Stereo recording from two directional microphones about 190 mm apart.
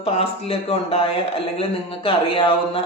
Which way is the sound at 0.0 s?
30° left (ahead or behind).